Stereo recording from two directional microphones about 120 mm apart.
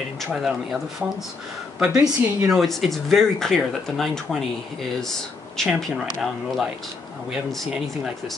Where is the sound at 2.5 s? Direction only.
Centre (ahead or behind).